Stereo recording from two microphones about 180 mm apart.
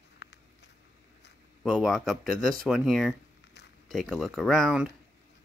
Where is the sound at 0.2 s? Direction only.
70° left (ahead or behind).